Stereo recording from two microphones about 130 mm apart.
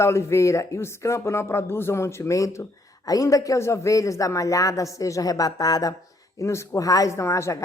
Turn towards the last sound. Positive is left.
turn(degrees=20)  # may be behind; listen again after turning